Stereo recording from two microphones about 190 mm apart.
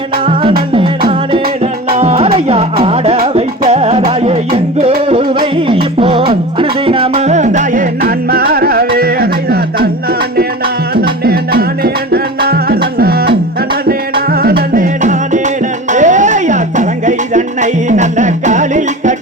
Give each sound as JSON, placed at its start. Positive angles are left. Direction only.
{"t": 0.7, "sound": "music", "side_deg": -25}